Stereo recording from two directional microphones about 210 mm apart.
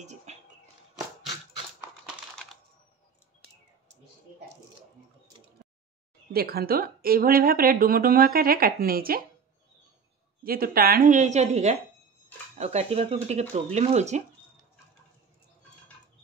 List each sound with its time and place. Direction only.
0.0 s music: 35° right (ahead or behind)
1.8 s typing: centre (ahead or behind)
6.3 s speech: 45° right (ahead or behind)
10.4 s a woman's voice: 45° right (ahead or behind)